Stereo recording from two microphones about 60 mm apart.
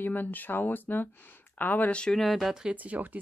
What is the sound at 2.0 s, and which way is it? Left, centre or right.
Speech, centre.